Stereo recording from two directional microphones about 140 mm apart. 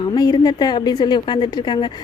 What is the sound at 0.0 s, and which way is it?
A woman's voice, 30° left (ahead or behind).